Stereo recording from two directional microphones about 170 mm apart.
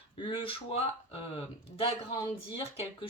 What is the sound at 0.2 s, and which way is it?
Speech, 30° left (ahead or behind).